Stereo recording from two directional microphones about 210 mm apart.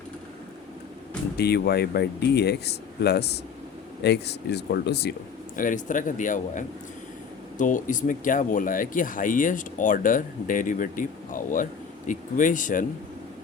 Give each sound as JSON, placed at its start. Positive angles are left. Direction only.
{"t": 1.4, "sound": "speech", "side_deg": 50}
{"t": 5.5, "sound": "speech", "side_deg": 40}